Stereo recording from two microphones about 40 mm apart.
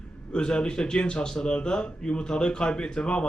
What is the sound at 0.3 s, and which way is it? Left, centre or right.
Speech, left.